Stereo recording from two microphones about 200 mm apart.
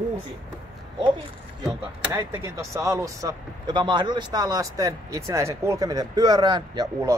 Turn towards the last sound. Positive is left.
turn(degrees=-20)  # may be behind; listen again after turning